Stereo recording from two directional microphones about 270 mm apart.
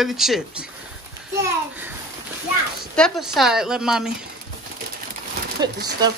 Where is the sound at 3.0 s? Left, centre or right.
Centre.